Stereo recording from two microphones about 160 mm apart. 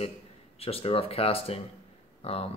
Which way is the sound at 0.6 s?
40° left (ahead or behind).